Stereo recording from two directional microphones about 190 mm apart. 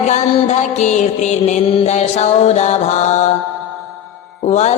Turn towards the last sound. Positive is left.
turn(degrees=35)  # may be behind; listen again after turning